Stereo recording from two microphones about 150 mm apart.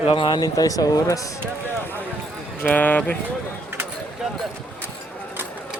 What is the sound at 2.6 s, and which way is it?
Speech, 10° left (ahead or behind).